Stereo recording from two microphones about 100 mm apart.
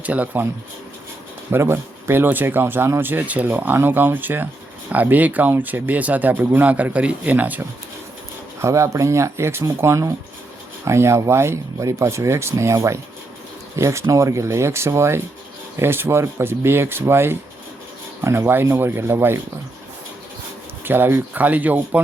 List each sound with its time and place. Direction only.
0.0 s speech: 15° right (ahead or behind)
1.5 s speech: 25° right (ahead or behind)
8.6 s speech: 30° right (ahead or behind)
20.8 s speech: 20° right (ahead or behind)